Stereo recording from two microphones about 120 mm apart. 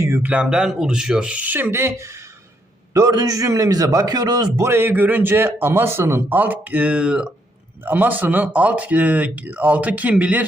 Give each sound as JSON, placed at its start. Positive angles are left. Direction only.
{"t": 0.0, "sound": "speech", "side_deg": -20}
{"t": 0.3, "sound": "a man's voice", "side_deg": -10}
{"t": 4.6, "sound": "a man's voice", "side_deg": -20}